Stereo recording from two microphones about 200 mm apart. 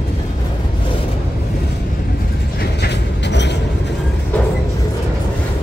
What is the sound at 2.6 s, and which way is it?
Train, 55° left (ahead or behind).